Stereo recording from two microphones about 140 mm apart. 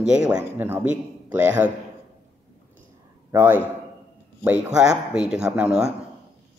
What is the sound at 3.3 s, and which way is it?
A man's voice, 15° right (ahead or behind).